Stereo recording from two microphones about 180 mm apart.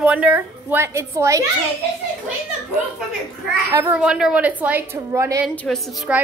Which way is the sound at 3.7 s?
15° right (ahead or behind).